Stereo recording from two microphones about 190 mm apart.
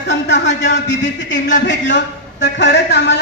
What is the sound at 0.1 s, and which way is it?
A man's voice, 65° left (ahead or behind).